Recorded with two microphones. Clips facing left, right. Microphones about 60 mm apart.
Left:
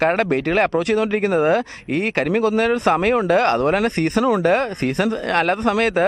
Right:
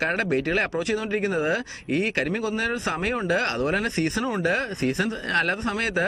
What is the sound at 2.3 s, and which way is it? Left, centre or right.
Speech, left.